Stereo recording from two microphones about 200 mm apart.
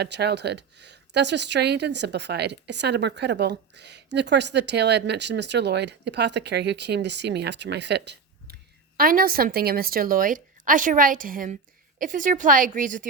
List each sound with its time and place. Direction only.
0.0 s speech: 55° right (ahead or behind)
9.0 s a woman's voice: 45° right (ahead or behind)